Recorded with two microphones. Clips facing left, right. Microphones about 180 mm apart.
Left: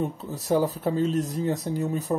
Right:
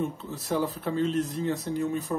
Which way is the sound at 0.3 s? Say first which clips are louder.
Left 8 dB; 40° left (ahead or behind).